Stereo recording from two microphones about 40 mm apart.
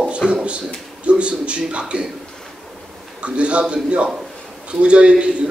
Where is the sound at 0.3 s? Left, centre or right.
Right.